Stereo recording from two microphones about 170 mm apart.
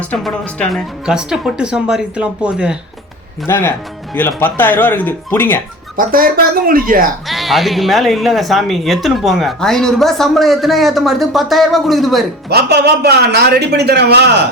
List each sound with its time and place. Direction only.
0.0 s speech: 5° left (ahead or behind)
3.4 s speech: 15° left (ahead or behind)
6.0 s speech: 55° right (ahead or behind)
7.3 s speech: centre (ahead or behind)
12.5 s a man's voice: 70° right (ahead or behind)